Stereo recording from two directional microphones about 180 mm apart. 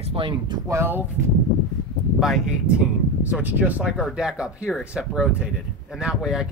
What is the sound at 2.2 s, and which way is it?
Speech, 5° right (ahead or behind).